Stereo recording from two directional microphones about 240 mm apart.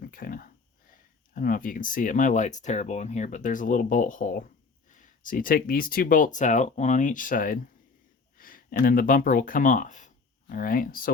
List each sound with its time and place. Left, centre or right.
0.0 s speech: left